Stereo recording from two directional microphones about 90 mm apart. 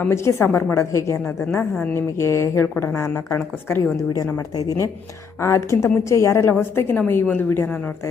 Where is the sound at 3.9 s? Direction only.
40° left (ahead or behind).